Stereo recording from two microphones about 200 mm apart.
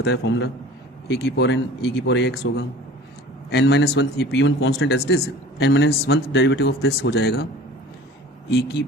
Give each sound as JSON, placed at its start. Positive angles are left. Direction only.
{"t": 0.0, "sound": "speech", "side_deg": 60}